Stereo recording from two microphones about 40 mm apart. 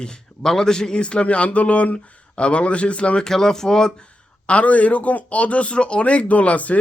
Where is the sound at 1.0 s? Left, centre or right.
Left.